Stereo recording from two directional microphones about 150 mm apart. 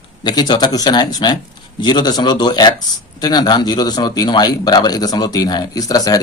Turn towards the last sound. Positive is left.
turn(degrees=25)  # may be behind; listen again after turning